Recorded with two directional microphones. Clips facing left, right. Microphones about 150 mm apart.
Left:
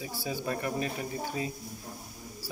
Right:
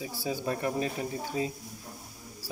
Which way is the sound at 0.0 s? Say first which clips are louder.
Right 2 dB; 25° right (ahead or behind).